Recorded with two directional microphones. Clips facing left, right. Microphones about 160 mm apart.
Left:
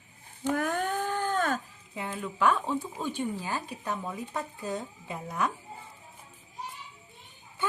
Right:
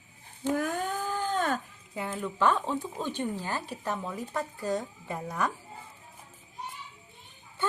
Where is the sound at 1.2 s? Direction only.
50° left (ahead or behind).